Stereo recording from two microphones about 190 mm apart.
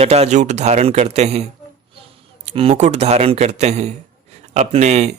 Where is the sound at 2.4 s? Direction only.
30° right (ahead or behind).